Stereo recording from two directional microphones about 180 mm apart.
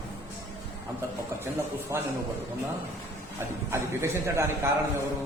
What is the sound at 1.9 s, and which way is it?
Speech, 15° right (ahead or behind).